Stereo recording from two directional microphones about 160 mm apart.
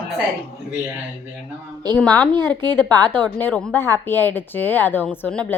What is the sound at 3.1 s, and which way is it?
A woman's voice, 10° left (ahead or behind).